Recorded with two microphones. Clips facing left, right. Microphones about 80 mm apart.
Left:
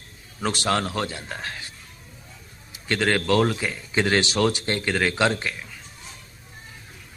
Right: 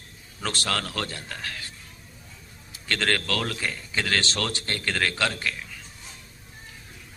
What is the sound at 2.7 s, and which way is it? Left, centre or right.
A man's voice, centre.